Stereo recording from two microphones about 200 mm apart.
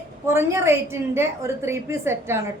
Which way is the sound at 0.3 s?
10° right (ahead or behind).